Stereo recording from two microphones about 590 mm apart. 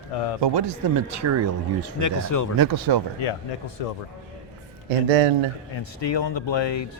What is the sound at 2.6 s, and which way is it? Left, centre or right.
Speech, right.